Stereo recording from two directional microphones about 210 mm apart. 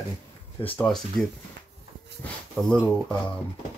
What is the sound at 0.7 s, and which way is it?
Speech, 5° left (ahead or behind).